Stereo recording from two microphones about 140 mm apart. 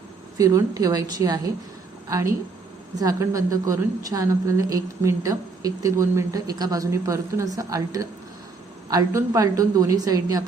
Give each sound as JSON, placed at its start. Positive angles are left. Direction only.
{"t": 0.3, "sound": "a woman's voice", "side_deg": -25}